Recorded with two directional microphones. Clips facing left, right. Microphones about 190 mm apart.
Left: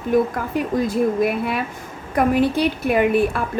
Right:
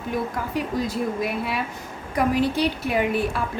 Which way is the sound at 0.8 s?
50° left (ahead or behind).